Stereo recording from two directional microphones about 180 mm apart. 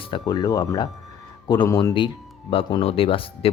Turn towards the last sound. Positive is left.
turn(degrees=30)  # may be behind; listen again after turning